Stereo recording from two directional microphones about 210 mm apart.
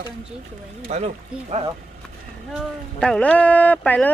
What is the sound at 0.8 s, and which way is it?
Speech, 30° right (ahead or behind).